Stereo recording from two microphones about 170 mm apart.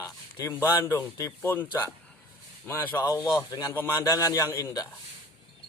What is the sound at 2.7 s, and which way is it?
A man's voice, 15° left (ahead or behind).